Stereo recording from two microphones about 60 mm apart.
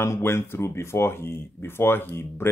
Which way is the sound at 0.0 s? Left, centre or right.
Left.